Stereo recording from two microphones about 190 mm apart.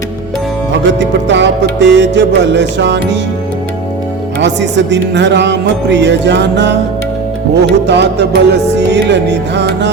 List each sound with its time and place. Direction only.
0.9 s speech: 70° right (ahead or behind)
4.4 s speech: 70° right (ahead or behind)
7.5 s music: 65° right (ahead or behind)